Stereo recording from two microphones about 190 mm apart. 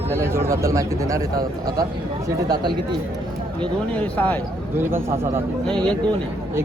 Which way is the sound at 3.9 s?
5° left (ahead or behind).